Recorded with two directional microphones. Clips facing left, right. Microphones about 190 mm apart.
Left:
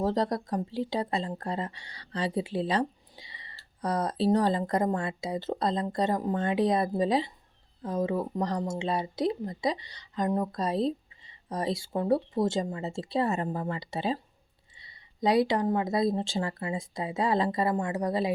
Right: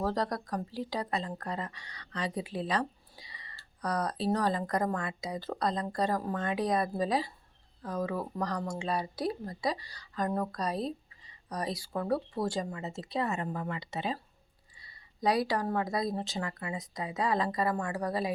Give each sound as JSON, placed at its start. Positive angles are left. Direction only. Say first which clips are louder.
{"t": 0.0, "sound": "speech", "louder": "left 4 dB", "side_deg": 25}